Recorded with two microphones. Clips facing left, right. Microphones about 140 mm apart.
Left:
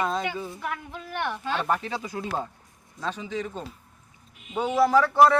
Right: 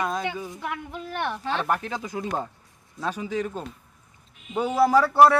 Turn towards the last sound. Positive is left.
turn(degrees=-10)  # may be behind; listen again after turning